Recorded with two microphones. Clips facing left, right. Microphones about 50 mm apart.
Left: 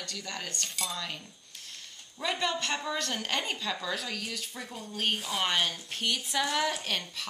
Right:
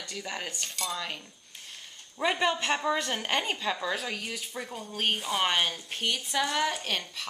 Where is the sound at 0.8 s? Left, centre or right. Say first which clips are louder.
Right 3 dB; centre.